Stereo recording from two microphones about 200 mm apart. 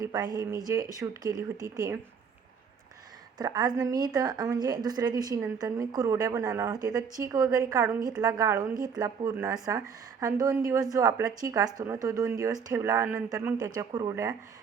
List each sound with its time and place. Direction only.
0.0 s a woman's voice: 20° right (ahead or behind)
3.3 s a woman's voice: 20° right (ahead or behind)